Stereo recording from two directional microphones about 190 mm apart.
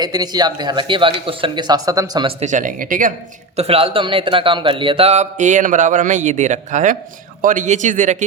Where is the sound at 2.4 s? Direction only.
40° right (ahead or behind).